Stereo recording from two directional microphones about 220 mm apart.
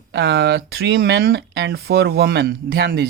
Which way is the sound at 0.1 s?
50° right (ahead or behind).